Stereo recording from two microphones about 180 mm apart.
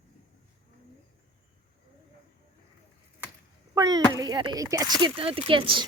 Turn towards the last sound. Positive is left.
turn(degrees=-30)  # may be behind; listen again after turning